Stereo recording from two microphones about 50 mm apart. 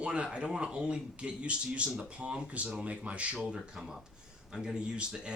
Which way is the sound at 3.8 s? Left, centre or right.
Centre.